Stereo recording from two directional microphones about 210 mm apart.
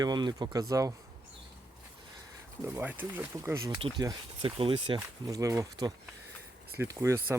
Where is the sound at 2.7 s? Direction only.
10° right (ahead or behind).